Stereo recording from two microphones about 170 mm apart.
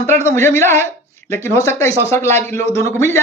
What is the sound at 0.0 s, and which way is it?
Speech, 15° left (ahead or behind).